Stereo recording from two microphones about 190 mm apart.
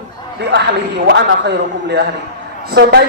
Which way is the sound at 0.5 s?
65° right (ahead or behind).